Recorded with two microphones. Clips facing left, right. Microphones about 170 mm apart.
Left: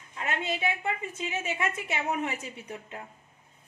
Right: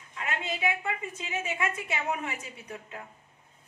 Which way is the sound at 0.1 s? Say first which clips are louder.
Left 2 dB; 30° left (ahead or behind).